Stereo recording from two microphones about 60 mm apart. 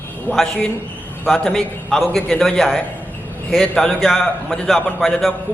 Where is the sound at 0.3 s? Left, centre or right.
Left.